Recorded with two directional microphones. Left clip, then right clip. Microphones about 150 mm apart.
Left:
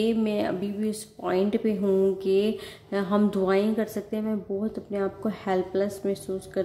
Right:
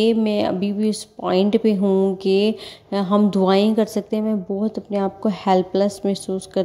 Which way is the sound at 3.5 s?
40° right (ahead or behind).